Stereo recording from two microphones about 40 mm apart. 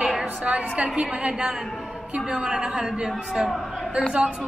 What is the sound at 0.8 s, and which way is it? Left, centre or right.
A woman's voice, right.